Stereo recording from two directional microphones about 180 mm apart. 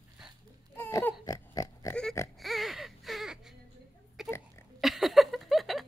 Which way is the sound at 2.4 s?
Centre (ahead or behind).